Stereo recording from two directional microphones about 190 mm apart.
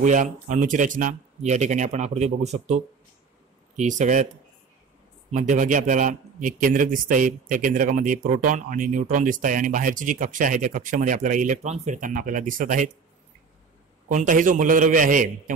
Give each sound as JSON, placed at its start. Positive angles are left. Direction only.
{"t": 0.0, "sound": "speech", "side_deg": -40}
{"t": 5.3, "sound": "a man's voice", "side_deg": -40}
{"t": 14.0, "sound": "a man's voice", "side_deg": -45}